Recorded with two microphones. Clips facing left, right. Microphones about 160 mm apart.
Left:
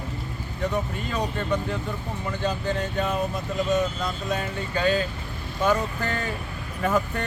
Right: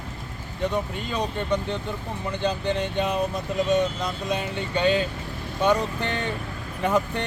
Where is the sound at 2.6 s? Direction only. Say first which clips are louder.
Right 1 dB; 20° right (ahead or behind).